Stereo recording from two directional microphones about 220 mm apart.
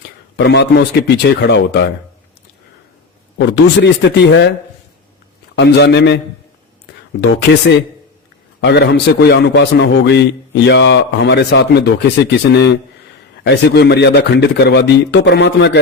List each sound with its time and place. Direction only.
0.3 s a man's voice: 50° left (ahead or behind)
3.3 s a man's voice: 50° left (ahead or behind)
5.5 s a man's voice: 50° left (ahead or behind)
8.6 s a man's voice: 50° left (ahead or behind)